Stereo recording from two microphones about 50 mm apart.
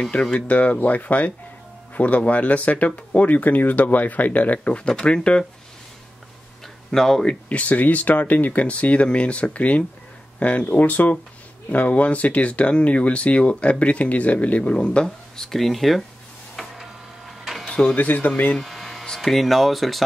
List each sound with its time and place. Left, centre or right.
0.1 s speech: left
6.9 s speech: centre
7.4 s speech: left
15.0 s speech: centre
16.5 s vehicle: centre
17.6 s a sound: centre
17.9 s speech: left
18.6 s a sound: centre
19.0 s speech: centre